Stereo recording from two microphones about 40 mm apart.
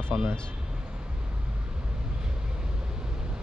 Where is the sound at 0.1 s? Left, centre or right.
Right.